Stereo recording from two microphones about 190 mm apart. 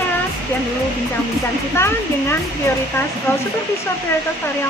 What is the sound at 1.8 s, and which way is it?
Speech, 15° left (ahead or behind).